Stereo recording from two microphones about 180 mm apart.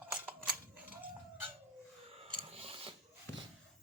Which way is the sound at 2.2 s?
30° right (ahead or behind).